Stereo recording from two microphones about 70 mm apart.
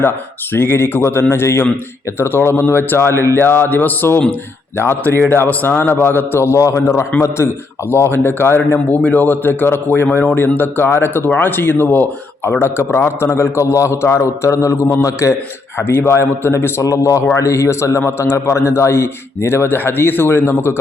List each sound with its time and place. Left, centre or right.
0.5 s a man's voice: left
15.8 s a man's voice: left
16.8 s a man's voice: left